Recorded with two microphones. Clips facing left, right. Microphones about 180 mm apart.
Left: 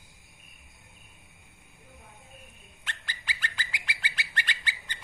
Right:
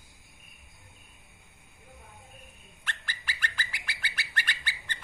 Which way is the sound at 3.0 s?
20° left (ahead or behind).